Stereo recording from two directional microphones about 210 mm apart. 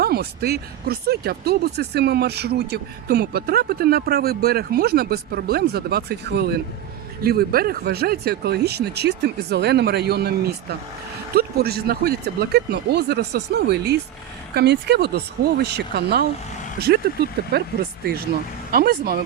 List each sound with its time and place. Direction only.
0.0 s speech: 50° right (ahead or behind)
18.7 s speech: 45° right (ahead or behind)